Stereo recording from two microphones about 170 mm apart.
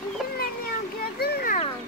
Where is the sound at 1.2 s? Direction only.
65° left (ahead or behind).